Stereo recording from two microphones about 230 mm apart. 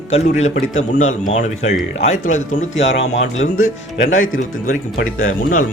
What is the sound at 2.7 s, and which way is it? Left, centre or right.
Speech, left.